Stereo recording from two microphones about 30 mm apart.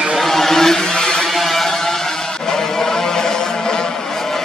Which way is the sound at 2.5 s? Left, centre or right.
Centre.